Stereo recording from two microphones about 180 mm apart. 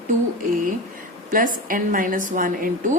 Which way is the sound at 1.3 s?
50° right (ahead or behind).